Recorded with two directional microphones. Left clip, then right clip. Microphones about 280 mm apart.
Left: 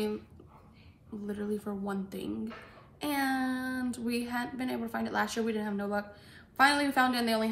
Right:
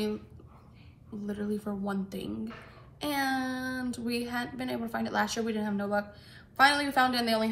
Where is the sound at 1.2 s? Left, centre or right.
Centre.